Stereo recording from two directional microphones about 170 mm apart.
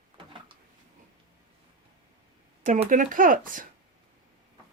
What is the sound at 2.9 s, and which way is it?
Speech, 50° right (ahead or behind).